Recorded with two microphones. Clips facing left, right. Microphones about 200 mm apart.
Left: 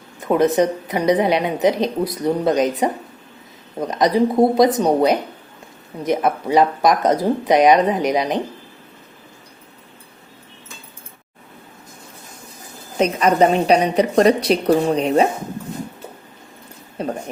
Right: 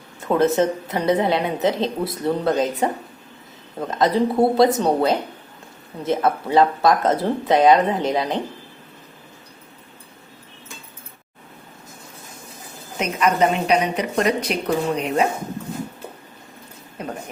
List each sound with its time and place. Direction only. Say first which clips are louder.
0.3 s speech: left 2 dB; 15° left (ahead or behind)
13.0 s a woman's voice: left 4 dB; 35° left (ahead or behind)
17.0 s a woman's voice: left 6 dB; 30° left (ahead or behind)